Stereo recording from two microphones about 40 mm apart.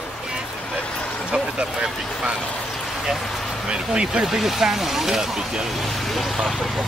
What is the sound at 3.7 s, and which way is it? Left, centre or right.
Speech, right.